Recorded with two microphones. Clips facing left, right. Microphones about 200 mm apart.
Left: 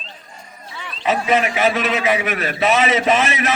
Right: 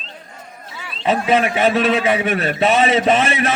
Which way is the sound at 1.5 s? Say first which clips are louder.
Right 3 dB; 30° right (ahead or behind).